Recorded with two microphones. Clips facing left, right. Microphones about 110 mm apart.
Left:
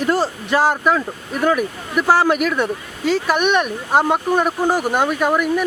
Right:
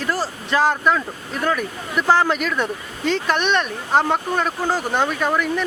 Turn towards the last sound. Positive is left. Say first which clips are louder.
# left 3 dB
turn(degrees=10)  # may be behind; listen again after turning